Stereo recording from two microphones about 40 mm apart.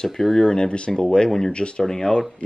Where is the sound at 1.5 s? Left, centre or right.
Left.